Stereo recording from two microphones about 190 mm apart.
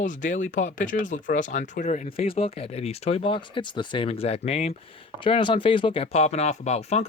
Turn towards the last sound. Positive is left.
turn(degrees=35)  # may be behind; listen again after turning